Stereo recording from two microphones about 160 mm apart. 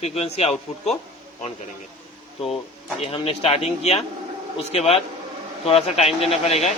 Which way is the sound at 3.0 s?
40° left (ahead or behind).